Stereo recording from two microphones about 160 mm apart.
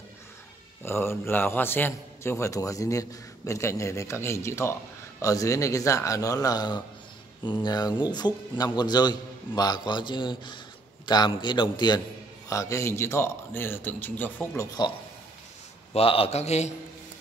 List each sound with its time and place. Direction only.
0.8 s a man's voice: 15° left (ahead or behind)
15.9 s a man's voice: 35° left (ahead or behind)